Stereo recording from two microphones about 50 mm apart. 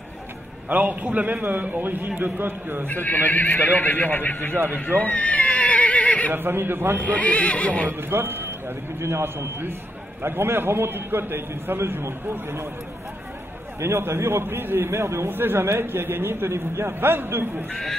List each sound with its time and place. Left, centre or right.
0.7 s a man's voice: right
2.9 s speech: left
5.0 s neigh: left
6.3 s a man's voice: right
7.0 s speech: left
8.1 s a man's voice: right
13.7 s a man's voice: right
14.9 s speech: right
15.2 s a man's voice: right